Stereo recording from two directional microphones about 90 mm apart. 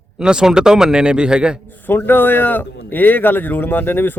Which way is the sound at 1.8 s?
25° left (ahead or behind).